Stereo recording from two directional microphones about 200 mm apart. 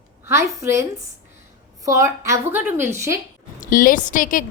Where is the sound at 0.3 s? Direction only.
15° right (ahead or behind).